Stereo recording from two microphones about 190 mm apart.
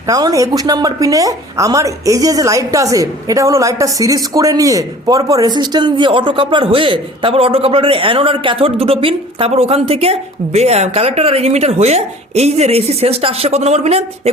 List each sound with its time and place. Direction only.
0.1 s a woman's voice: 20° right (ahead or behind); by 14.0 s 35° right (ahead or behind)